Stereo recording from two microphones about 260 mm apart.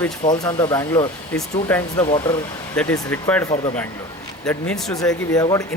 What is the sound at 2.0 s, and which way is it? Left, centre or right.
Speech, centre.